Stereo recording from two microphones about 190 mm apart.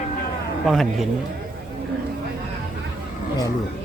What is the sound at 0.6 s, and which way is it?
Speech, centre (ahead or behind).